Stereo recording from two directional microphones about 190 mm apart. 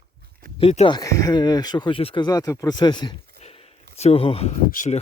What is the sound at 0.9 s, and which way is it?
Speech, 20° left (ahead or behind).